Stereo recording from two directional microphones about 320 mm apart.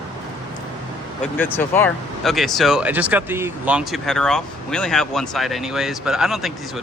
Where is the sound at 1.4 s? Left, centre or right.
Centre.